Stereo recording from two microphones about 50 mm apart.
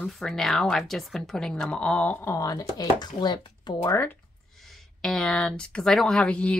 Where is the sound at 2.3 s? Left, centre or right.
Left.